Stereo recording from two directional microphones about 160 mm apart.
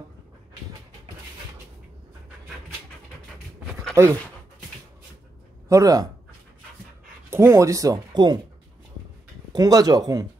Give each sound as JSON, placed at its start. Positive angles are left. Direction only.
{"t": 3.9, "sound": "speech", "side_deg": -15}
{"t": 5.7, "sound": "speech", "side_deg": -20}
{"t": 7.2, "sound": "speech", "side_deg": -15}
{"t": 9.5, "sound": "speech", "side_deg": -25}